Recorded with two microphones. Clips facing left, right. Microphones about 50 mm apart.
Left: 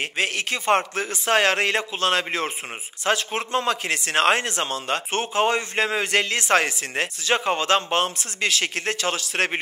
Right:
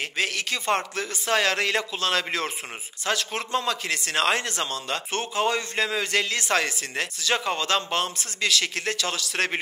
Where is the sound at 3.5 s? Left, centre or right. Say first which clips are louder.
Left 3 dB; left.